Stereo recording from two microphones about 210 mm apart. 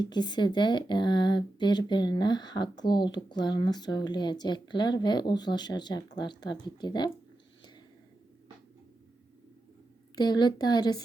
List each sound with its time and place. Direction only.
0.0 s speech: 20° left (ahead or behind)
10.2 s speech: 20° left (ahead or behind)